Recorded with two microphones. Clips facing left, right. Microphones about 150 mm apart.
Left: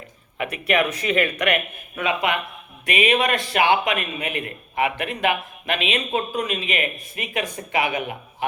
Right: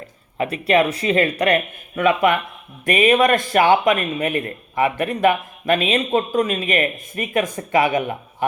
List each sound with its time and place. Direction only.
0.3 s speech: 30° right (ahead or behind)
2.0 s a man's voice: 50° right (ahead or behind)